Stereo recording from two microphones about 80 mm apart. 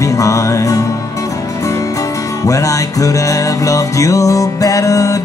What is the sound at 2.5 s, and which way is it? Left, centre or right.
Music, left.